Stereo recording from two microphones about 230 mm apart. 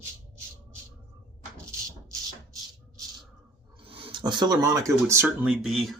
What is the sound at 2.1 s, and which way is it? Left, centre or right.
Music, centre.